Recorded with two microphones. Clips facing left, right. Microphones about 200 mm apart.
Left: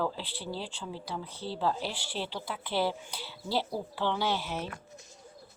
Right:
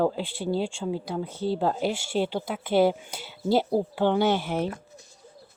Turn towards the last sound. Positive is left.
turn(degrees=-55)  # may be behind; listen again after turning